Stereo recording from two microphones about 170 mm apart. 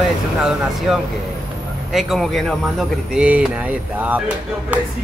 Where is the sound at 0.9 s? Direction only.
5° right (ahead or behind).